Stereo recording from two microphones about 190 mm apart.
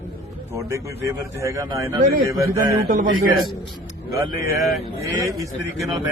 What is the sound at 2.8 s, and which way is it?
Speech, 45° right (ahead or behind).